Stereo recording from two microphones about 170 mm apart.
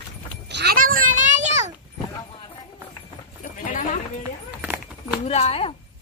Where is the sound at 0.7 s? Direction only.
55° right (ahead or behind).